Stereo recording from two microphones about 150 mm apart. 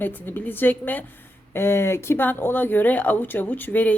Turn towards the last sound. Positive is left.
turn(degrees=10)  # may be behind; listen again after turning